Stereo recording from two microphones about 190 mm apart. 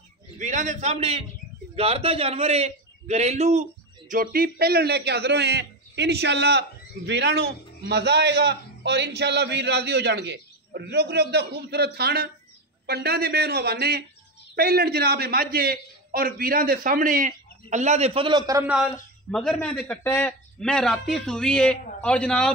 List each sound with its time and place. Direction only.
0.4 s a man's voice: 40° right (ahead or behind)
4.1 s a man's voice: 50° right (ahead or behind); by 18.7 s 20° right (ahead or behind)
19.3 s a man's voice: centre (ahead or behind)